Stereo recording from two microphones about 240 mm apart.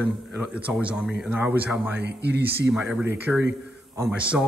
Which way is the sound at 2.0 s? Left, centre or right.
Right.